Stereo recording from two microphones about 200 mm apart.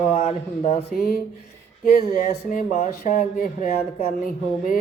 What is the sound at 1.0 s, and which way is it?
Speech, 50° left (ahead or behind).